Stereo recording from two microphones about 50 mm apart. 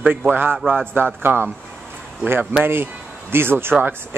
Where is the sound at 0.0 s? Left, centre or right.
Right.